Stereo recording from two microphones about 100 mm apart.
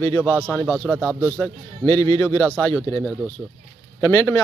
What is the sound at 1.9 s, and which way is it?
Speech, 30° left (ahead or behind).